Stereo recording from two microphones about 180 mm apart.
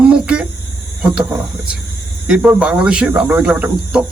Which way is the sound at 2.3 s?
5° right (ahead or behind).